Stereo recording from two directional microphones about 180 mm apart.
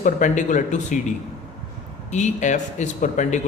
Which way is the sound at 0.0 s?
45° left (ahead or behind).